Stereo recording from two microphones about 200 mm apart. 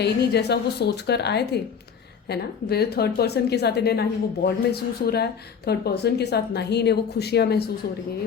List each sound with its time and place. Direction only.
0.0 s a woman's voice: 55° left (ahead or behind)